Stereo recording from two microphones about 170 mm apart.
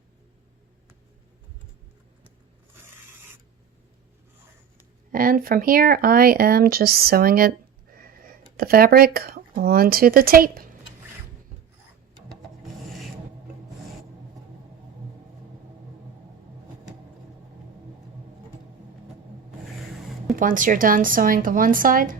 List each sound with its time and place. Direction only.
5.1 s speech: 55° right (ahead or behind)
19.8 s a sound: centre (ahead or behind)
20.3 s a woman's voice: 50° right (ahead or behind)